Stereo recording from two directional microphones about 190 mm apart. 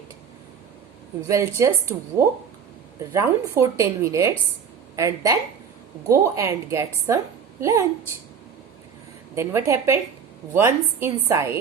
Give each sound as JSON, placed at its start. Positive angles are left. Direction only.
{"t": 1.3, "sound": "a woman's voice", "side_deg": -15}
{"t": 9.3, "sound": "a woman's voice", "side_deg": -15}